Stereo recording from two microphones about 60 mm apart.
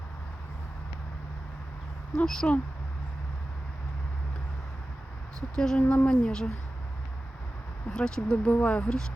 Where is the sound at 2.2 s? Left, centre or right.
Centre.